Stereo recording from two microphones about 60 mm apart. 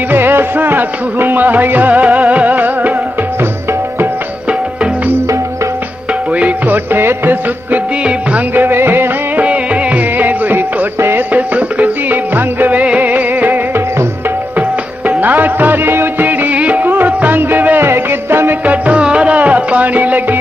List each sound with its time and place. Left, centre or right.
0.1 s music: right
6.3 s music: right
6.9 s music: right
9.4 s music: right
11.0 s music: right
11.3 s music: right
15.1 s music: right
17.8 s music: right
18.7 s music: right